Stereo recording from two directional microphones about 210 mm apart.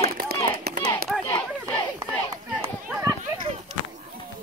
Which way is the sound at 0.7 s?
45° right (ahead or behind).